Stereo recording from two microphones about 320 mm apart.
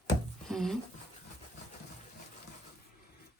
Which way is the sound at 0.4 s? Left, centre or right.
Centre.